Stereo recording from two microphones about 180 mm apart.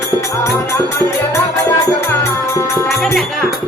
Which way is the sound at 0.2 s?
15° left (ahead or behind).